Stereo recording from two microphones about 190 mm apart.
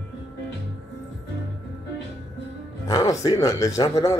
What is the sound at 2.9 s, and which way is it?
Speech, 20° left (ahead or behind).